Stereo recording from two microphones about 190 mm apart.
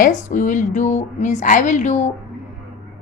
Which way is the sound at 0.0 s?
40° left (ahead or behind).